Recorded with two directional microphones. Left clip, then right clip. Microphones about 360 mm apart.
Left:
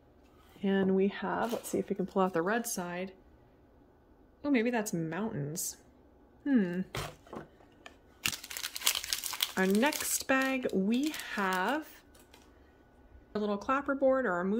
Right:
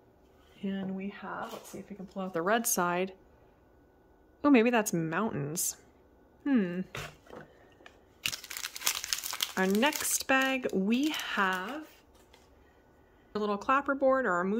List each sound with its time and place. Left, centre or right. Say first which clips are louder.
0.6 s speech: left 10 dB; centre
2.1 s speech: left 5 dB; centre
2.4 s a woman's voice: right 5 dB; centre
4.4 s a woman's voice: right 6 dB; centre
8.4 s speech: even; centre
13.3 s a woman's voice: right 3 dB; centre